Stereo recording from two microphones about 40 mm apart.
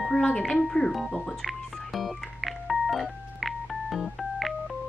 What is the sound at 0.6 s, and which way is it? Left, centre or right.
Speech, centre.